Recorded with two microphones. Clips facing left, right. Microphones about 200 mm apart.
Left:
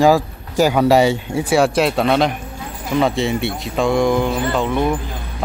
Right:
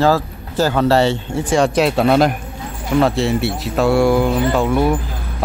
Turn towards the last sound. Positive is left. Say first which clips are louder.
# right 3 dB
turn(degrees=-10)  # may be behind; listen again after turning